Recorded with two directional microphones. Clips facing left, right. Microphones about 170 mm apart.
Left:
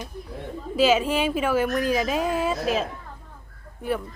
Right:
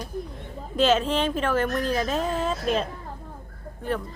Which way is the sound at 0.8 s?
10° left (ahead or behind).